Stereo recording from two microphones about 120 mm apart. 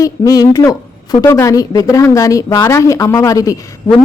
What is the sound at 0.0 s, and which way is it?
A woman's voice, 30° left (ahead or behind).